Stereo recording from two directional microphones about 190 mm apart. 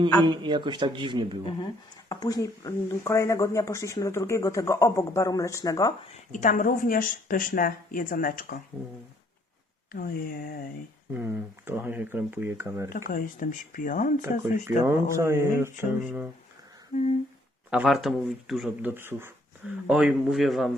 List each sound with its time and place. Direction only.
0.2 s a man's voice: 25° right (ahead or behind)
2.0 s speech: 20° left (ahead or behind)
6.3 s speech: 40° left (ahead or behind)
9.9 s speech: 50° left (ahead or behind)
11.1 s speech: 10° right (ahead or behind)
13.1 s speech: 45° left (ahead or behind)
14.8 s speech: 15° right (ahead or behind)
16.9 s humming: 40° left (ahead or behind)
17.7 s speech: 5° right (ahead or behind)